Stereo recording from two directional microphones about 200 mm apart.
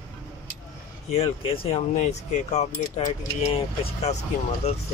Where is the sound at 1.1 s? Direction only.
30° left (ahead or behind).